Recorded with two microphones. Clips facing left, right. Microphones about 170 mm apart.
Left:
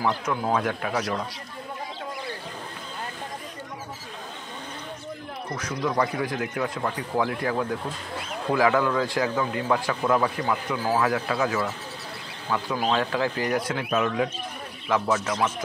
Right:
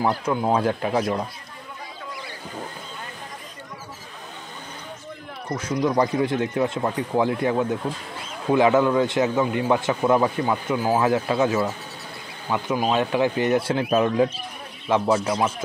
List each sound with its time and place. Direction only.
0.0 s a man's voice: 25° right (ahead or behind)
5.6 s a man's voice: 25° right (ahead or behind)